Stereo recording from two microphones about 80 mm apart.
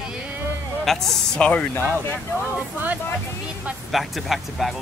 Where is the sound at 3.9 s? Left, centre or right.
Centre.